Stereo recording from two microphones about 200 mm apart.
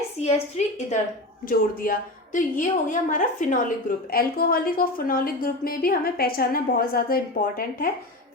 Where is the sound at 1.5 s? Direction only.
45° left (ahead or behind).